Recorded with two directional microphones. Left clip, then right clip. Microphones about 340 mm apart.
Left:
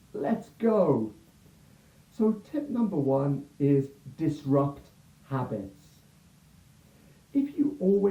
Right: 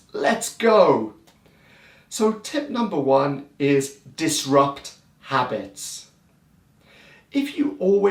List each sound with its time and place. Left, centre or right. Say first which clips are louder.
0.2 s speech: right 9 dB; centre
2.1 s speech: right 7 dB; centre
7.3 s speech: right 4 dB; centre
7.7 s speech: right 8 dB; right